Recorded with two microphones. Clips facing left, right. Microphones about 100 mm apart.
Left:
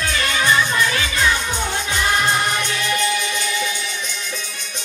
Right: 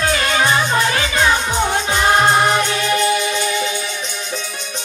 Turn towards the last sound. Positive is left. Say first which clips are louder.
# right 4 dB
turn(degrees=-45)  # may be behind; listen again after turning